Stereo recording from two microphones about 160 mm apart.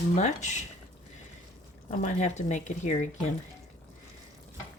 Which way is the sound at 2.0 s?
45° left (ahead or behind).